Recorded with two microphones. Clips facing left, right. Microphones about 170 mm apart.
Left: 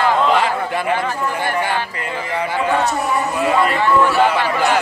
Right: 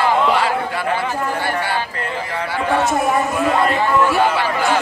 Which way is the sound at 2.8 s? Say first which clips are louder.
Right 2 dB; 50° right (ahead or behind).